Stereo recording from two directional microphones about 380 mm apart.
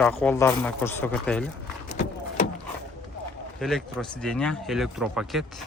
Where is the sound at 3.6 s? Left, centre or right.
Centre.